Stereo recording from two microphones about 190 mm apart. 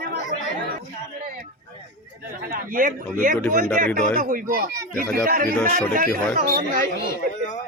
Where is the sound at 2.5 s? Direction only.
50° right (ahead or behind).